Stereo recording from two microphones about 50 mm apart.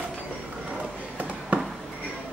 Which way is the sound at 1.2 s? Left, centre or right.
Right.